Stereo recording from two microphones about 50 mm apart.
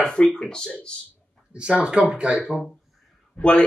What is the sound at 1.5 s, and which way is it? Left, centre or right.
Speech, right.